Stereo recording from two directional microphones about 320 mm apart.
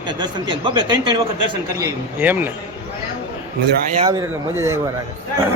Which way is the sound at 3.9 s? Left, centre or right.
Centre.